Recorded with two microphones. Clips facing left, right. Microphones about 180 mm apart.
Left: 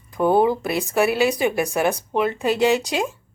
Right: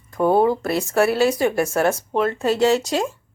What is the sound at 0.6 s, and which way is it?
Speech, 15° left (ahead or behind).